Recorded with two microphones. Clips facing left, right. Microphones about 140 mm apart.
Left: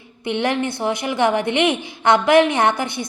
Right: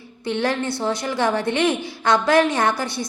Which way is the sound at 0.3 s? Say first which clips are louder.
Left 2 dB; 20° left (ahead or behind).